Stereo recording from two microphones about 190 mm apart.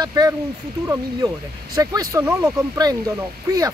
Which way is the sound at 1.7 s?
20° right (ahead or behind).